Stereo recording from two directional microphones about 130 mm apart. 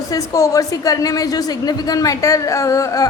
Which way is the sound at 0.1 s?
25° left (ahead or behind).